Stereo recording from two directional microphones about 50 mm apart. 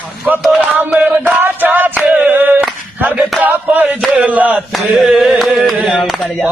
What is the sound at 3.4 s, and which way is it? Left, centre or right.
Music, right.